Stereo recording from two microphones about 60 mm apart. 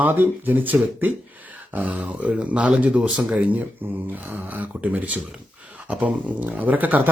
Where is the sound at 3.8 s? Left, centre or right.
Right.